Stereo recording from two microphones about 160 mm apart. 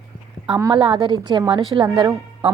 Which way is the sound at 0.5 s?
30° right (ahead or behind).